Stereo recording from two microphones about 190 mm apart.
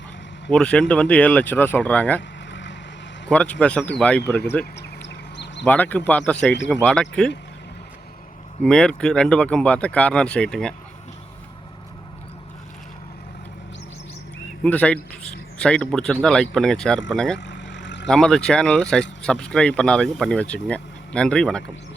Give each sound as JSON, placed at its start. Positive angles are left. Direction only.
{"t": 0.5, "sound": "speech", "side_deg": 5}
{"t": 2.5, "sound": "vehicle", "side_deg": 70}
{"t": 3.2, "sound": "speech", "side_deg": 5}
{"t": 4.8, "sound": "a sound", "side_deg": 65}
{"t": 5.6, "sound": "speech", "side_deg": 10}
{"t": 8.6, "sound": "speech", "side_deg": 5}
{"t": 14.6, "sound": "speech", "side_deg": 5}
{"t": 17.3, "sound": "vehicle", "side_deg": 70}
{"t": 18.1, "sound": "speech", "side_deg": 5}